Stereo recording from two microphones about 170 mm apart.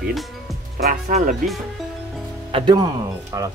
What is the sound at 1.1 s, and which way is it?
Speech, 55° right (ahead or behind).